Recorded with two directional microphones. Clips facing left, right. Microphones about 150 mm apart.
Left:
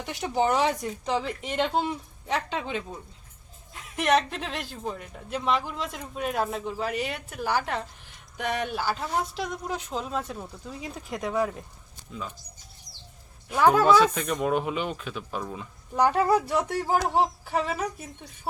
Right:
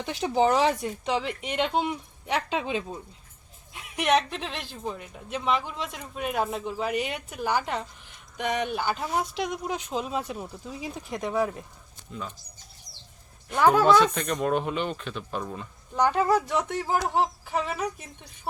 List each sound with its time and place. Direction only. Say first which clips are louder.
0.0 s speech: right 2 dB; 25° right (ahead or behind)
3.8 s speech: even; centre (ahead or behind)
13.5 s speech: even; centre (ahead or behind)